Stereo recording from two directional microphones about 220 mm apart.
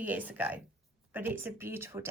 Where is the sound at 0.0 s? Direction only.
5° right (ahead or behind).